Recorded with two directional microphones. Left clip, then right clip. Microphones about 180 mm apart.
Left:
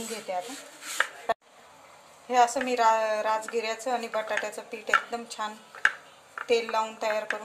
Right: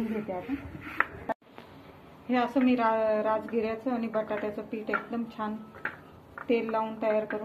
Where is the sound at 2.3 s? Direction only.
50° left (ahead or behind).